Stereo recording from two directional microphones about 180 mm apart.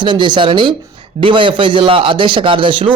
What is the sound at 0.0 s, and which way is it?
A man's voice, 25° right (ahead or behind).